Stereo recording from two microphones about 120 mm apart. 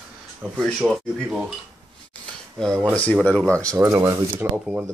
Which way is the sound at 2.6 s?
5° left (ahead or behind).